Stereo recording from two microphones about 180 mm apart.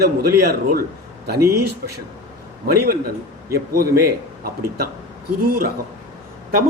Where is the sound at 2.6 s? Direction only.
55° right (ahead or behind).